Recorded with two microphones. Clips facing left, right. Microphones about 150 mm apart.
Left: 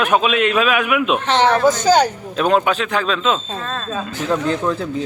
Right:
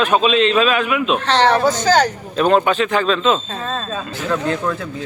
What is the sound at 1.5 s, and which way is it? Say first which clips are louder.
Speech: left 1 dB; 15° right (ahead or behind).